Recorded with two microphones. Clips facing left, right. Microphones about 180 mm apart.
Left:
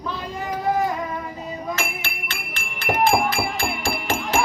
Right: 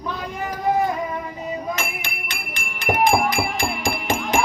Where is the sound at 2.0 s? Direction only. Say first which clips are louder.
Even; 15° right (ahead or behind).